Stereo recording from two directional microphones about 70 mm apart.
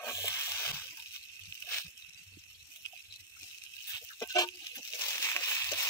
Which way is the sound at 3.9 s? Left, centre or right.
Left.